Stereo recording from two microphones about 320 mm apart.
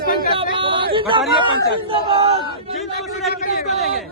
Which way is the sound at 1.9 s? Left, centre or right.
Centre.